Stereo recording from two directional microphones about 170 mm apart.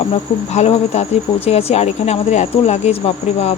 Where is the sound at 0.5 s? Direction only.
40° left (ahead or behind).